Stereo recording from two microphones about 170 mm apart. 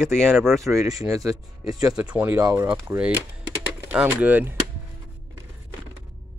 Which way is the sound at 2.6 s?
10° right (ahead or behind).